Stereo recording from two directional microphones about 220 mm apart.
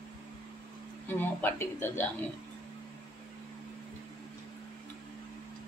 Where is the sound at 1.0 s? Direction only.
10° left (ahead or behind).